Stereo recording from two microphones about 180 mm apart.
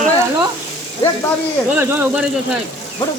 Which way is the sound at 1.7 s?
10° right (ahead or behind).